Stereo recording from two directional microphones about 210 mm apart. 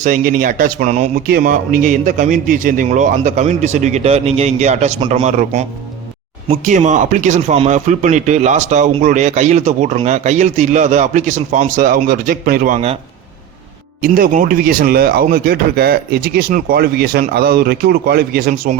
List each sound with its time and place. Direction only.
0.0 s speech: 40° right (ahead or behind)
14.0 s speech: 40° right (ahead or behind)